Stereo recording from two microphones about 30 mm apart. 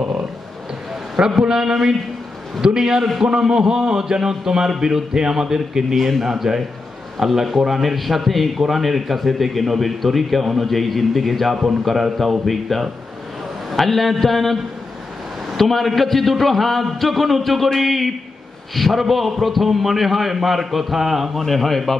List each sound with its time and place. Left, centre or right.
1.4 s a man's voice: right
5.9 s a man's voice: centre
6.2 s a man's voice: centre
15.7 s a man's voice: centre
21.5 s a man's voice: centre